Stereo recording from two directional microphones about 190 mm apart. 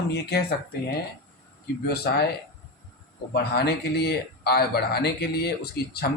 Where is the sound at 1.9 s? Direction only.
55° left (ahead or behind).